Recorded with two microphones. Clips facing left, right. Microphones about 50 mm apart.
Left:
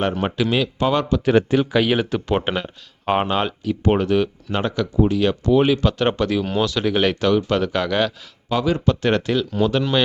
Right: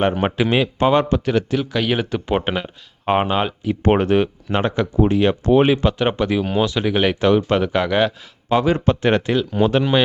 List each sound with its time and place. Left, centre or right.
0.0 s a man's voice: right
1.5 s speech: centre
1.9 s speech: centre
3.8 s a man's voice: right; by 8.1 s centre
8.4 s a man's voice: right